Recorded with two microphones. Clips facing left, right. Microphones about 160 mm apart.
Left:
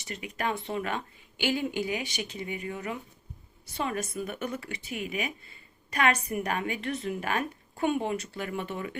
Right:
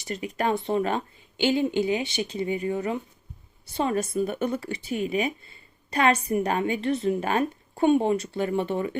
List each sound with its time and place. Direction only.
0.0 s a woman's voice: 35° right (ahead or behind)